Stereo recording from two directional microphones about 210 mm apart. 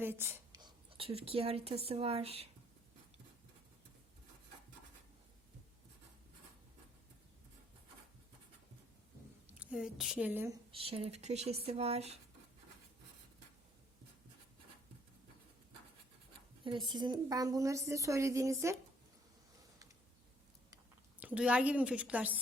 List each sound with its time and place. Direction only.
0.0 s speech: 10° right (ahead or behind); by 2.5 s 30° right (ahead or behind)
9.5 s a woman's voice: 5° right (ahead or behind)
10.7 s speech: 25° right (ahead or behind)
16.9 s a woman's voice: 20° right (ahead or behind)
21.2 s a woman's voice: 5° right (ahead or behind)